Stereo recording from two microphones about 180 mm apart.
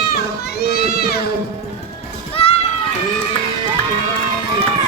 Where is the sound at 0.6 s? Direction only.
60° left (ahead or behind).